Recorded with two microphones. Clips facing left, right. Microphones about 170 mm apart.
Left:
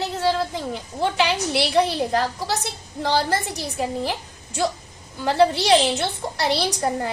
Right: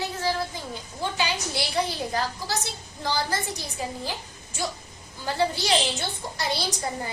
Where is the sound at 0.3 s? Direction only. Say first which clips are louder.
Left 7 dB; 70° left (ahead or behind).